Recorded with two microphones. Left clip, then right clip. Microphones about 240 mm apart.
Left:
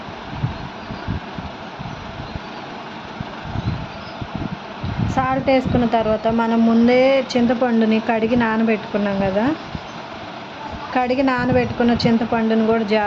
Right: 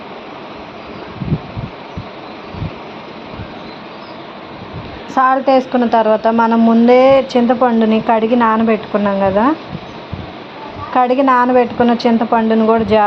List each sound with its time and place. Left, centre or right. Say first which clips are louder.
5.1 s a woman's voice: right 7 dB; centre
10.9 s a woman's voice: right 8 dB; centre